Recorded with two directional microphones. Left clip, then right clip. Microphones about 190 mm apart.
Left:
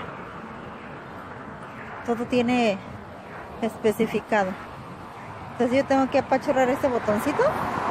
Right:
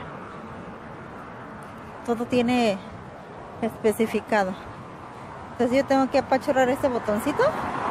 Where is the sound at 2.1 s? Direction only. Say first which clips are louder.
Even; 10° right (ahead or behind).